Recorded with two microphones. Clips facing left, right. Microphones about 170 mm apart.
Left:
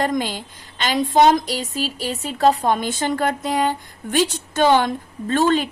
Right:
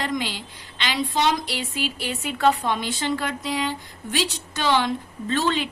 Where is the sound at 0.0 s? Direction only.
45° left (ahead or behind).